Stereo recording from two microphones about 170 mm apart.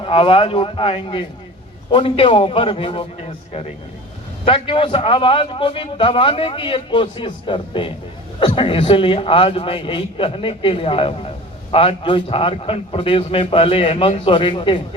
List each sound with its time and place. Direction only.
0.0 s a man's voice: 30° left (ahead or behind)